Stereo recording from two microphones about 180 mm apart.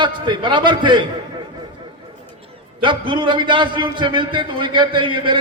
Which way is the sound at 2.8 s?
25° right (ahead or behind).